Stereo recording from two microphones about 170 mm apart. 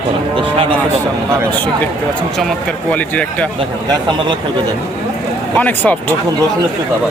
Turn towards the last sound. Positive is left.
turn(degrees=10)  # may be behind; listen again after turning